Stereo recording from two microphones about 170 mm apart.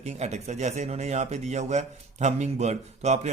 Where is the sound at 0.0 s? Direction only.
40° right (ahead or behind).